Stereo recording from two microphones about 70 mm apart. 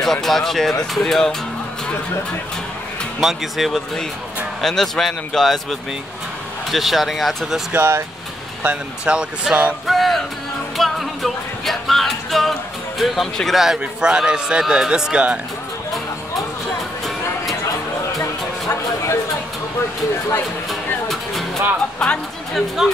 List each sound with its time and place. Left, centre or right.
0.0 s speech: centre
3.2 s speech: centre
7.7 s speech: right
8.6 s speech: centre
9.8 s music: centre
13.0 s speech: centre
18.2 s a sound: left
22.0 s a woman's voice: centre
22.8 s speech: centre